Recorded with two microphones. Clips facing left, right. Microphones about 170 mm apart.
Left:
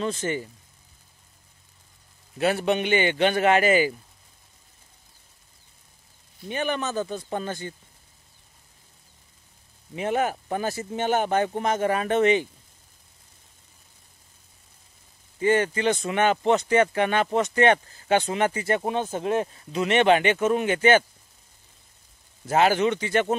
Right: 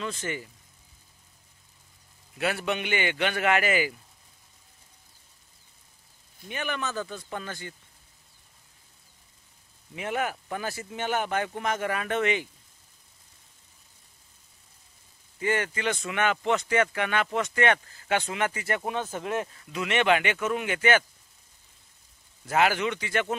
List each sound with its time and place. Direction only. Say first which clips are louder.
0.0 s speech: left 6 dB; 25° left (ahead or behind)
2.3 s speech: left 6 dB; 30° left (ahead or behind)
6.5 s speech: left 5 dB; 30° left (ahead or behind)
9.9 s speech: left 5 dB; 30° left (ahead or behind)
15.3 s speech: left 6 dB; 30° left (ahead or behind)
22.5 s speech: left 4 dB; 30° left (ahead or behind)